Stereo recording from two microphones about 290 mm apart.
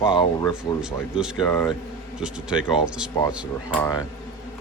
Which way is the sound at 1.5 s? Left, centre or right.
Centre.